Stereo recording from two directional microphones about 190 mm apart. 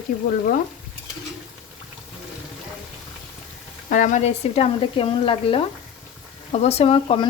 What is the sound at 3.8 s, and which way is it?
Speech, 40° left (ahead or behind).